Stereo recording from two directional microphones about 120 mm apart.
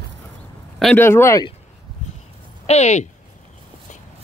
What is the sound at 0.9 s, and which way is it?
Speech, 20° left (ahead or behind).